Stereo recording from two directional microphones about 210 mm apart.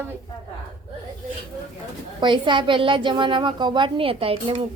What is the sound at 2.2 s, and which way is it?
A woman's voice, 20° right (ahead or behind).